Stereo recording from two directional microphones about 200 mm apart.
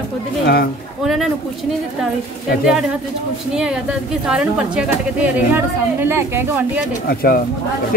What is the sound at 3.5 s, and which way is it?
A woman's voice, 5° right (ahead or behind).